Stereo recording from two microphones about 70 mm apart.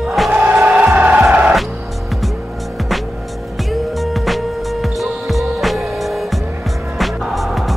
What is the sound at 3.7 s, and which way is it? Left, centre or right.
Music, centre.